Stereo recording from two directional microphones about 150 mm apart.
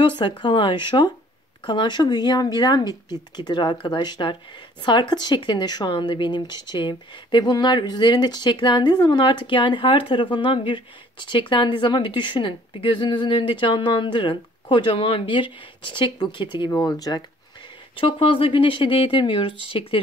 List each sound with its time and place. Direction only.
0.0 s speech: 30° left (ahead or behind)
17.9 s speech: 35° left (ahead or behind)